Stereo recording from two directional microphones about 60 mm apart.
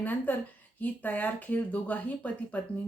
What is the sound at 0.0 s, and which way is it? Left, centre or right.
Speech, left.